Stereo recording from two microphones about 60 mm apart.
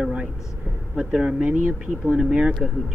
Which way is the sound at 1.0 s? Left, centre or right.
Centre.